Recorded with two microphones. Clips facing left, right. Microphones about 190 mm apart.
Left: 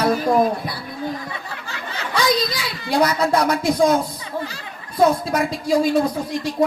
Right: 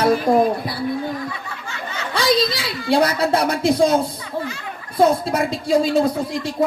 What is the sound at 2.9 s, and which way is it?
Speech, 30° right (ahead or behind).